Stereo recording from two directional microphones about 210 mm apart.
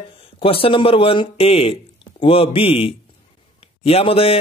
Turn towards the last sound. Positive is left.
turn(degrees=25)  # may be behind; listen again after turning